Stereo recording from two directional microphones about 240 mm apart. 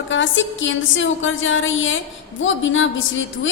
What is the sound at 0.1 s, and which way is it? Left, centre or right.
A woman's voice, left.